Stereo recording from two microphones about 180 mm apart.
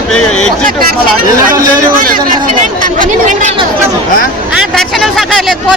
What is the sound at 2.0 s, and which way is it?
A woman's voice, 50° right (ahead or behind).